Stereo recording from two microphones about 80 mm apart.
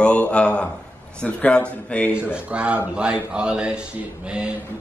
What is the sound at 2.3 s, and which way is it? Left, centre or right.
Speech, centre.